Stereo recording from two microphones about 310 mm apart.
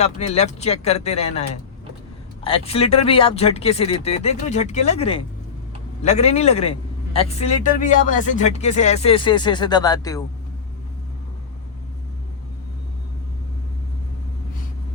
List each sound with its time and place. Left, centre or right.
0.0 s speech: left